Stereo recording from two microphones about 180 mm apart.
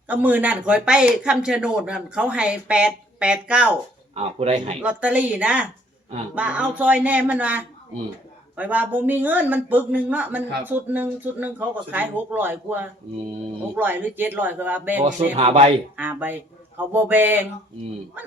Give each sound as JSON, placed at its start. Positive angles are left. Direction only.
{"t": 0.1, "sound": "speech", "side_deg": -10}
{"t": 4.1, "sound": "speech", "side_deg": -35}
{"t": 4.8, "sound": "speech", "side_deg": -5}
{"t": 15.4, "sound": "speech", "side_deg": -40}
{"t": 16.0, "sound": "speech", "side_deg": -10}